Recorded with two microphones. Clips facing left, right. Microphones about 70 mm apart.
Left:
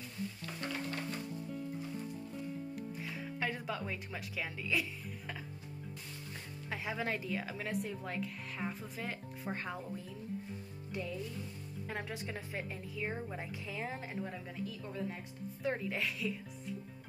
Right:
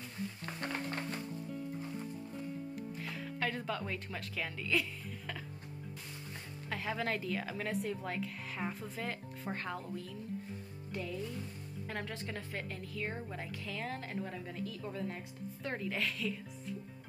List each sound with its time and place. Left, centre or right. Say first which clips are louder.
0.6 s music: right 1 dB; right
2.9 s music: even; centre
6.7 s speech: right 1 dB; centre
10.9 s speech: even; centre
11.9 s a woman's voice: even; centre
14.1 s speech: right 1 dB; centre